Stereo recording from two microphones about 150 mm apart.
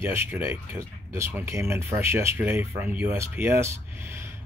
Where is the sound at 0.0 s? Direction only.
15° right (ahead or behind).